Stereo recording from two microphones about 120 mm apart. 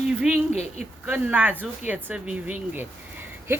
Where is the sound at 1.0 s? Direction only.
15° right (ahead or behind).